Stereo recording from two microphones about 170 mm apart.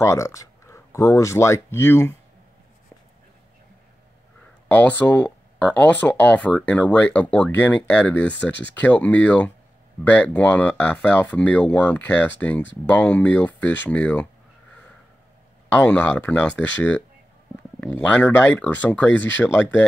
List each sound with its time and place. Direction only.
0.0 s speech: 15° left (ahead or behind)
4.6 s speech: 10° left (ahead or behind)
15.7 s speech: 10° left (ahead or behind)
18.0 s speech: 10° left (ahead or behind)